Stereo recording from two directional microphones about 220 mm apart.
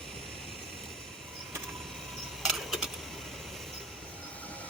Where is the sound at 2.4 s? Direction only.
Centre (ahead or behind).